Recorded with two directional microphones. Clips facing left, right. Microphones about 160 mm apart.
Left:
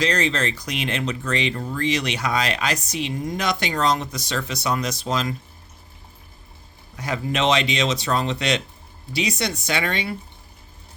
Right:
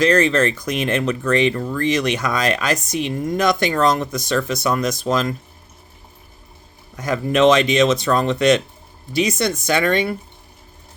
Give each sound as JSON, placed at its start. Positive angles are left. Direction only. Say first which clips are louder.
{"t": 0.0, "sound": "speech", "louder": "right 7 dB", "side_deg": -50}
{"t": 6.9, "sound": "speech", "louder": "right 6 dB", "side_deg": -45}